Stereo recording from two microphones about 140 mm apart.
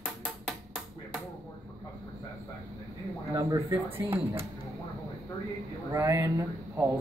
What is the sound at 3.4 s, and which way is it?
Speech, 25° right (ahead or behind).